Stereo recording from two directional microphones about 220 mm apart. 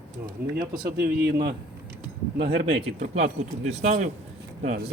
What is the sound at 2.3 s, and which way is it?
Speech, 25° right (ahead or behind).